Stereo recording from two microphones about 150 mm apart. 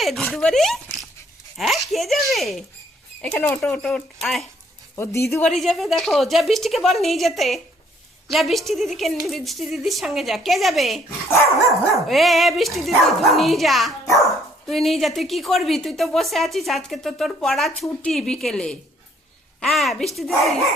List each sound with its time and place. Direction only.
0.0 s speech: centre (ahead or behind)
3.3 s speech: 15° left (ahead or behind)
3.8 s speech: centre (ahead or behind)
4.9 s speech: 20° left (ahead or behind)
5.4 s speech: centre (ahead or behind)